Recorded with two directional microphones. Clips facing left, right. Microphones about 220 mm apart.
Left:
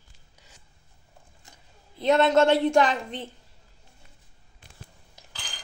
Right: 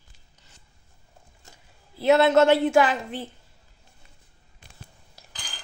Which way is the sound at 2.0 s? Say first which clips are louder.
Right 2 dB; 5° right (ahead or behind).